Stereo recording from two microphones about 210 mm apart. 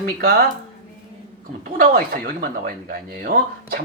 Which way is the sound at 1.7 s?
45° right (ahead or behind).